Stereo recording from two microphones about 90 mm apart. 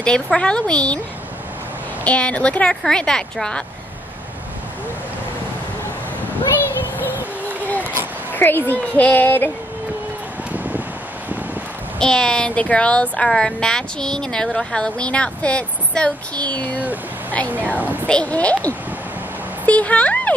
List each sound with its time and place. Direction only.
0.0 s speech: 10° left (ahead or behind)
2.0 s speech: 15° left (ahead or behind)
7.1 s music: 20° right (ahead or behind)
7.6 s a sound: 20° left (ahead or behind)
8.3 s a woman's voice: 20° left (ahead or behind)
10.5 s a sound: 15° right (ahead or behind)
12.0 s speech: 10° left (ahead or behind)
17.7 s a child's voice: 20° right (ahead or behind)
18.0 s speech: 15° left (ahead or behind)